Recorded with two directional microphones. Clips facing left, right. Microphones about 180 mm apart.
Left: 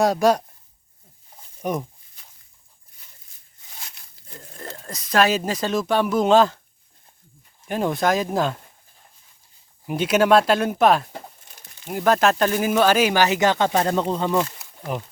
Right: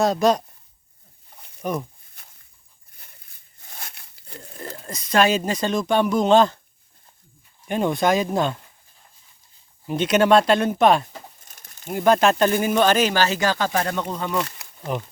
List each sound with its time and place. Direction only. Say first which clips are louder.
0.0 s speech: left 1 dB; 10° left (ahead or behind)
1.4 s a sound: right 2 dB; 65° right (ahead or behind)
2.2 s a sound: right 1 dB; 55° right (ahead or behind)
4.4 s speech: right 2 dB; centre (ahead or behind)
7.7 s speech: right 1 dB; centre (ahead or behind)
9.8 s speech: even; 5° left (ahead or behind)
11.4 s crumpling: left 1 dB; 45° right (ahead or behind)
11.9 s speech: right 1 dB; centre (ahead or behind); by 14.3 s 25° left (ahead or behind)
14.9 s speech: right 1 dB; 5° left (ahead or behind)